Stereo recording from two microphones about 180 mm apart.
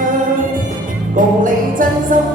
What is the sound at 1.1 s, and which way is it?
Music, 45° right (ahead or behind).